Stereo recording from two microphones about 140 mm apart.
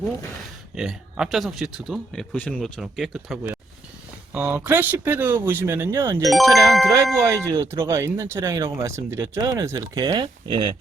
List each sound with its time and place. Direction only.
0.8 s speech: 5° right (ahead or behind)
2.3 s speech: 10° left (ahead or behind)
4.4 s speech: 10° right (ahead or behind)
6.3 s speech: centre (ahead or behind)
7.2 s speech: 20° right (ahead or behind)